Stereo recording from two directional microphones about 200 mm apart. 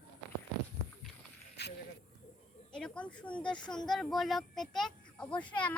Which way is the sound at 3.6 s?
5° left (ahead or behind).